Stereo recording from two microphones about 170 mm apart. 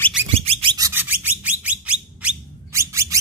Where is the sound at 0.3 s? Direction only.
35° right (ahead or behind).